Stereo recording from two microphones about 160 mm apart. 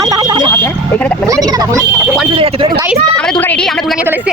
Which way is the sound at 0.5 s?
10° left (ahead or behind).